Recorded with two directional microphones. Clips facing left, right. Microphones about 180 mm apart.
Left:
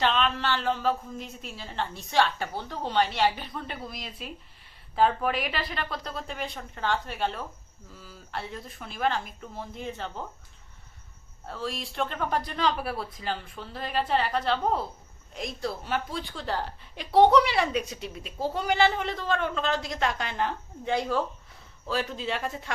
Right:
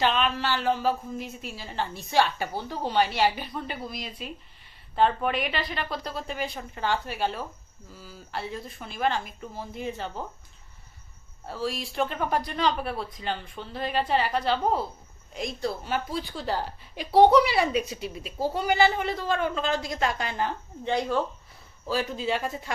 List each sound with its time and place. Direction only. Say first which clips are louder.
0.0 s a woman's voice: right 1 dB; 5° right (ahead or behind)
11.4 s a woman's voice: right 3 dB; 5° right (ahead or behind)